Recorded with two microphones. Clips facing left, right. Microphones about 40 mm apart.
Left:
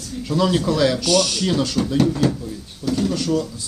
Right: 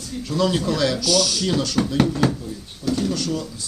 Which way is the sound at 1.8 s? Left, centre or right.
Right.